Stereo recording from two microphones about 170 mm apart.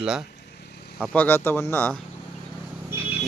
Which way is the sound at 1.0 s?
10° left (ahead or behind).